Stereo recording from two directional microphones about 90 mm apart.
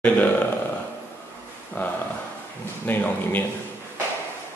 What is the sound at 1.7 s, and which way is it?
Speech, 20° left (ahead or behind).